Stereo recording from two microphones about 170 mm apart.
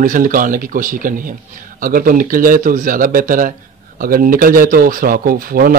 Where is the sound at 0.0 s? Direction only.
50° right (ahead or behind).